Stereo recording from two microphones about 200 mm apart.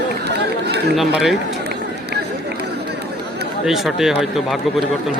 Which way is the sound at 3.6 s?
Centre (ahead or behind).